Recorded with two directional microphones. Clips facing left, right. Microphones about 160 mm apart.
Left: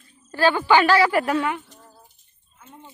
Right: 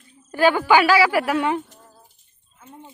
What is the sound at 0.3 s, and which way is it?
A woman's voice, 15° right (ahead or behind).